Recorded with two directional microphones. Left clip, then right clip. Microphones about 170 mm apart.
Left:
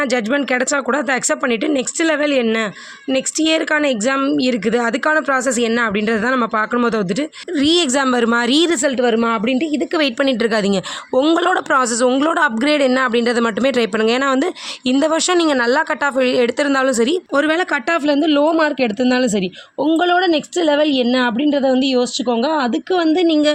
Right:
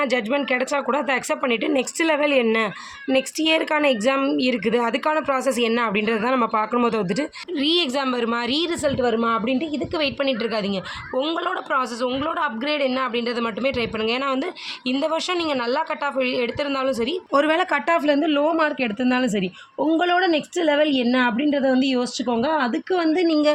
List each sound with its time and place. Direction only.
0.0 s speech: 35° left (ahead or behind)
7.5 s speech: 50° left (ahead or behind); by 17.2 s 65° left (ahead or behind)
17.3 s speech: 25° left (ahead or behind)
18.2 s speech: 40° left (ahead or behind)
22.4 s speech: 45° left (ahead or behind); by 23.5 s 30° left (ahead or behind)